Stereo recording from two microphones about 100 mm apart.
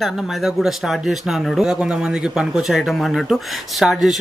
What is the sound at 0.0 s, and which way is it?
Speech, 5° right (ahead or behind).